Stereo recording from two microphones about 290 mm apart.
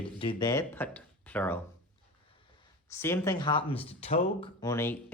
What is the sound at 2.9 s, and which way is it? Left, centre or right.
Speech, centre.